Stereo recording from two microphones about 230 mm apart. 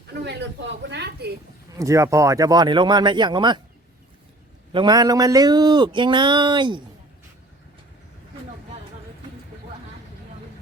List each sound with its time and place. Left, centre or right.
0.3 s speech: right
1.8 s speech: centre
4.7 s speech: centre